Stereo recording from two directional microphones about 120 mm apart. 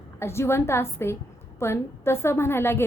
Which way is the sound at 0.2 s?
20° left (ahead or behind).